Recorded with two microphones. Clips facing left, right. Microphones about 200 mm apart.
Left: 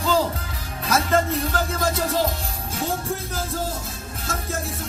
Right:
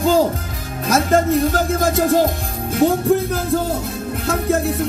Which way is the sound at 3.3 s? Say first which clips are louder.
Right 9 dB; 60° right (ahead or behind).